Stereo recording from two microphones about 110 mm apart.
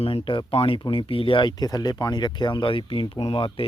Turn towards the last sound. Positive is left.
turn(degrees=55)  # may be behind; listen again after turning